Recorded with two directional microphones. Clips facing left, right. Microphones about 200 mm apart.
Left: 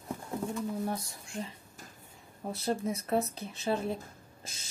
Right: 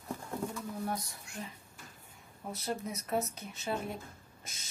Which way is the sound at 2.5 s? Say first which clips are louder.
Left 5 dB; 30° left (ahead or behind).